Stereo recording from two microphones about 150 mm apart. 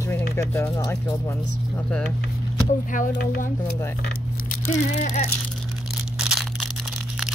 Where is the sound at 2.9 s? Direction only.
60° left (ahead or behind).